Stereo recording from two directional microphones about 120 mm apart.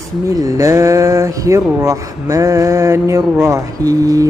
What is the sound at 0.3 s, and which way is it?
Speech, 30° right (ahead or behind).